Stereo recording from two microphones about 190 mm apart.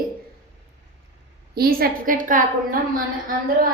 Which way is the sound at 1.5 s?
55° right (ahead or behind).